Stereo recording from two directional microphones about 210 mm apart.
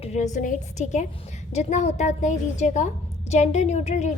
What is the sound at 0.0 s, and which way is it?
A woman's voice, 35° left (ahead or behind).